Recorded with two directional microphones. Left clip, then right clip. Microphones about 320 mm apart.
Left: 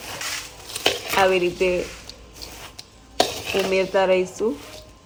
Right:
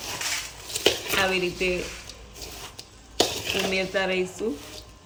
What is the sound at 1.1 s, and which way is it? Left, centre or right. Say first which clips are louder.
Speech: left 5 dB; centre.